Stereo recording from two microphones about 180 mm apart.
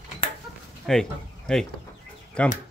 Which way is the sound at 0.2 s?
30° left (ahead or behind).